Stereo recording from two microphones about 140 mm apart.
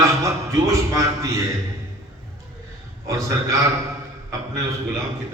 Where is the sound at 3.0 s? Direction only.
25° right (ahead or behind).